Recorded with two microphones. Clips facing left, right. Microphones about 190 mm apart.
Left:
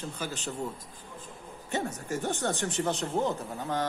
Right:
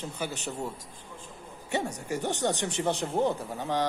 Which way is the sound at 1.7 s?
15° right (ahead or behind).